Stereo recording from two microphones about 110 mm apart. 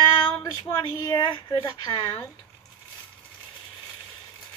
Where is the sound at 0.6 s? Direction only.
35° left (ahead or behind).